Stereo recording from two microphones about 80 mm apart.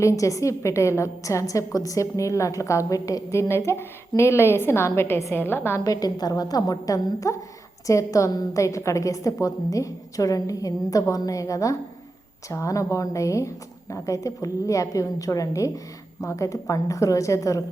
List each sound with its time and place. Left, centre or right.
0.0 s a woman's voice: left
5.8 s a woman's voice: left